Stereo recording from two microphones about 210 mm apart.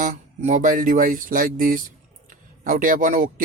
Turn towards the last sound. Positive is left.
turn(degrees=-40)  # may be behind; listen again after turning